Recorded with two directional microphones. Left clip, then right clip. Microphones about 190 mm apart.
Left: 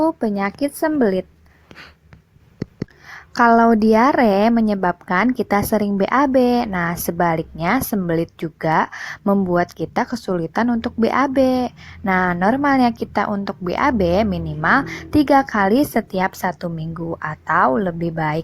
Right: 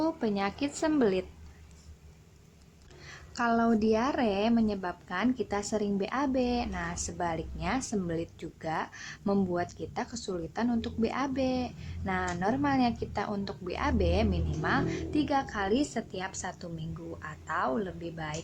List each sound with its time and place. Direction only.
0.0 s speech: 35° left (ahead or behind)
3.1 s speech: 35° left (ahead or behind)